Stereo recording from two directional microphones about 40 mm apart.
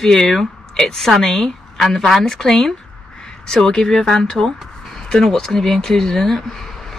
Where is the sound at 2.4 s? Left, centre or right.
Centre.